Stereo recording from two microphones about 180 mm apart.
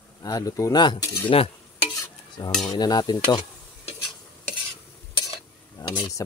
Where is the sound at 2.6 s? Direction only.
20° left (ahead or behind).